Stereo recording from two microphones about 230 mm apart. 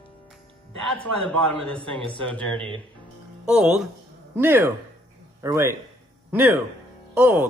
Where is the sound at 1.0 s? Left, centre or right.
Centre.